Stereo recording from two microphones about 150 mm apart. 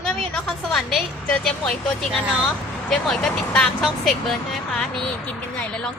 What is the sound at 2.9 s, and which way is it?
Speech, 5° left (ahead or behind).